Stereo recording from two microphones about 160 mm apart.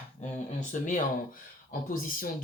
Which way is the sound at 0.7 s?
50° left (ahead or behind).